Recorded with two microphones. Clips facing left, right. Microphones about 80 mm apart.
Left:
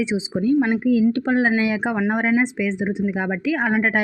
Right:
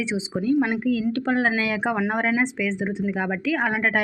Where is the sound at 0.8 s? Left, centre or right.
Centre.